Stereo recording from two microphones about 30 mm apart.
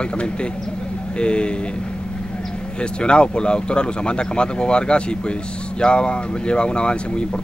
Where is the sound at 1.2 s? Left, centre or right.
Left.